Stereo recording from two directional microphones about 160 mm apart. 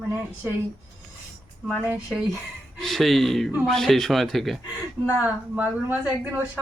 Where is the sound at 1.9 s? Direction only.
10° right (ahead or behind).